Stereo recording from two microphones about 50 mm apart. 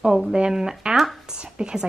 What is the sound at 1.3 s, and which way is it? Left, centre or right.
Speech, centre.